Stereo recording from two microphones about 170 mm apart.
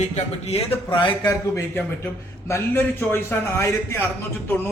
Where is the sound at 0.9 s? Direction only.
20° left (ahead or behind).